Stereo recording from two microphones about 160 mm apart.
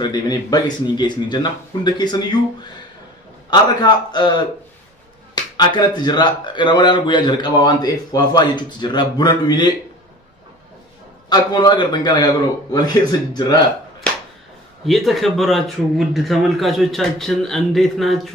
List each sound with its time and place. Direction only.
0.0 s speech: 25° left (ahead or behind)
3.4 s speech: 25° left (ahead or behind)
11.2 s speech: 25° left (ahead or behind)
14.9 s speech: centre (ahead or behind)